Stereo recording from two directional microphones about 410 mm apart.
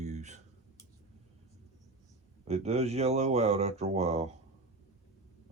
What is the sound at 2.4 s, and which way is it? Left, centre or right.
Speech, centre.